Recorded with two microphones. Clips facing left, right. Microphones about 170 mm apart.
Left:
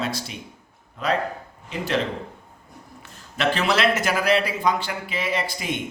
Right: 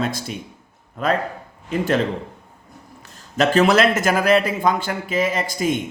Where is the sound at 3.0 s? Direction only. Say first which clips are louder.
Right 5 dB; 45° right (ahead or behind).